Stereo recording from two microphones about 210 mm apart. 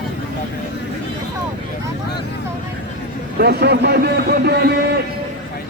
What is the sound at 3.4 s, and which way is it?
A man's voice, 50° right (ahead or behind).